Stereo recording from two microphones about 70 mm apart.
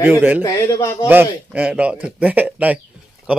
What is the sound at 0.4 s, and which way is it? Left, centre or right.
Speech, left.